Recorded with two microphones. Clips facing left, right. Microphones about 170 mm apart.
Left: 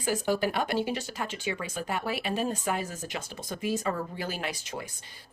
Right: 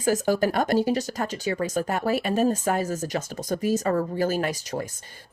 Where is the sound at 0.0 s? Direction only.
40° right (ahead or behind).